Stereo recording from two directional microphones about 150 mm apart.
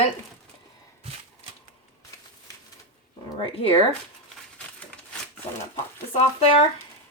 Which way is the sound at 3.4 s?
40° left (ahead or behind).